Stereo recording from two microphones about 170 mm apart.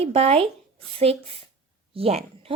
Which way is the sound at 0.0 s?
35° right (ahead or behind).